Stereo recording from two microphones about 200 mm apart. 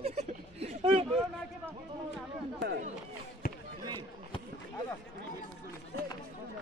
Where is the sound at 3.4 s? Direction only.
45° left (ahead or behind).